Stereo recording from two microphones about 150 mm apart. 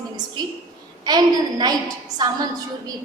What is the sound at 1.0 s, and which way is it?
A woman's voice, 25° right (ahead or behind).